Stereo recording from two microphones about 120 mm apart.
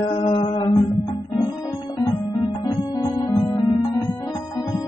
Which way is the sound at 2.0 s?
35° left (ahead or behind).